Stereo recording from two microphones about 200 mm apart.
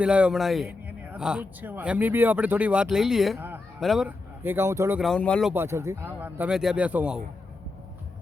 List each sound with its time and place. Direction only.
0.0 s a man's voice: 5° right (ahead or behind)
3.3 s a sound: 10° right (ahead or behind)
3.8 s speech: centre (ahead or behind)
4.9 s a man's voice: 5° left (ahead or behind)
5.5 s speech: 15° right (ahead or behind)